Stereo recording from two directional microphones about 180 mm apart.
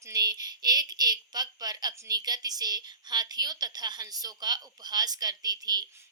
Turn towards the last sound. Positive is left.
turn(degrees=-20)  # may be behind; listen again after turning